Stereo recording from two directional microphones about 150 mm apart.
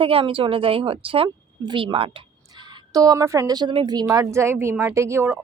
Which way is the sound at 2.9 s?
25° right (ahead or behind).